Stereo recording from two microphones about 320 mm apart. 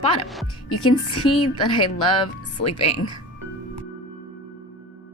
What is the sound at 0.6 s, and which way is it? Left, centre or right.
Speech, left.